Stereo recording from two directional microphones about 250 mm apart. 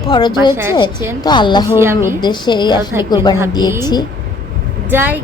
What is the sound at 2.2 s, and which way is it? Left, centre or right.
Speech, centre.